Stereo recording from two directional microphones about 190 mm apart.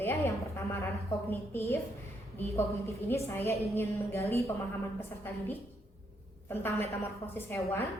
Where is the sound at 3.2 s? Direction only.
10° left (ahead or behind).